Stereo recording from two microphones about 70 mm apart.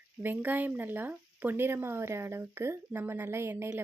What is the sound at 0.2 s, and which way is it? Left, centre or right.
A woman's voice, right.